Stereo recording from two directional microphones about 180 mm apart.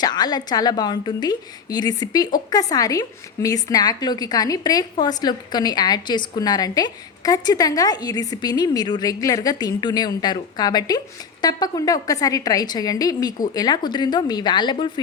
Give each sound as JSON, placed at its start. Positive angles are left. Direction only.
{"t": 0.0, "sound": "a woman's voice", "side_deg": 20}